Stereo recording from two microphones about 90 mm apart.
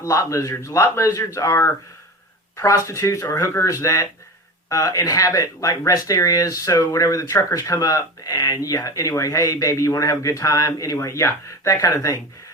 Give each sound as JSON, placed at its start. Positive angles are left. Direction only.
{"t": 0.0, "sound": "speech", "side_deg": 40}